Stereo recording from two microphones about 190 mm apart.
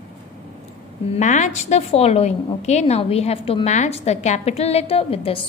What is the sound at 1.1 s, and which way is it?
A woman's voice, 40° left (ahead or behind).